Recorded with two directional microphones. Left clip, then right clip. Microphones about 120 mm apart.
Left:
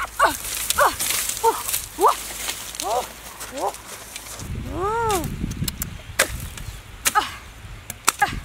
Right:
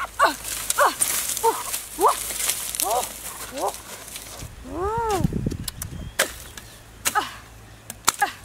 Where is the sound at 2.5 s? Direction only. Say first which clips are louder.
Even; 30° right (ahead or behind).